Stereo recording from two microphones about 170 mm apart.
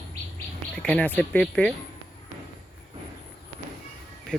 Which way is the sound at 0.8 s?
5° left (ahead or behind).